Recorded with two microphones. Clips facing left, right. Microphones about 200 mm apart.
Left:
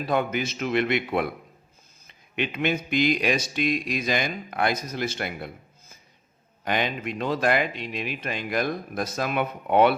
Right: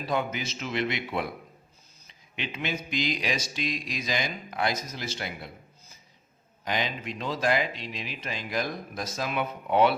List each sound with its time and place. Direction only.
0.0 s speech: 55° left (ahead or behind)
6.7 s speech: 55° left (ahead or behind)